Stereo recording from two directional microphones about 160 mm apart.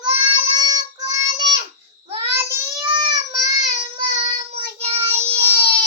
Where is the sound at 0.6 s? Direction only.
20° right (ahead or behind); by 5.4 s 40° right (ahead or behind).